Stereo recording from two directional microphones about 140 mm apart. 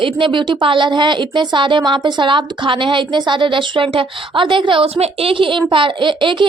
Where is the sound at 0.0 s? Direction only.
35° right (ahead or behind).